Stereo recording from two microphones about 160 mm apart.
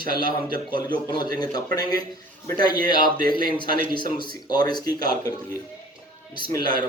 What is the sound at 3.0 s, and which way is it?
Speech, 65° right (ahead or behind).